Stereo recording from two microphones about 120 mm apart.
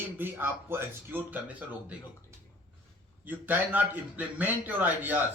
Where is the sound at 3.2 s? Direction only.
15° right (ahead or behind).